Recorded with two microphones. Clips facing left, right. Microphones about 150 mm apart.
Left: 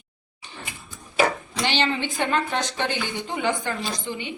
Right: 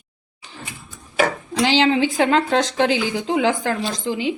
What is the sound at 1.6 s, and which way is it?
A woman's voice, 90° right.